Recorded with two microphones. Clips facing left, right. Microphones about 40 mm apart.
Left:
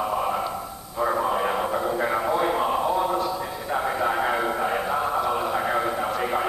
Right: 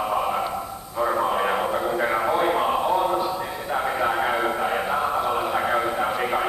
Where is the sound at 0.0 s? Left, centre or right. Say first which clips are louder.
Right 1 dB; centre.